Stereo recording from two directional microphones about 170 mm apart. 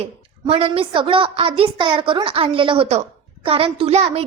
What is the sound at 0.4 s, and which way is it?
A woman's voice, 35° right (ahead or behind).